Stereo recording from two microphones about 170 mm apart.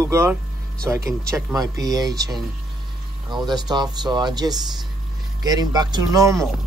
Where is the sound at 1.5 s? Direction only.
20° right (ahead or behind).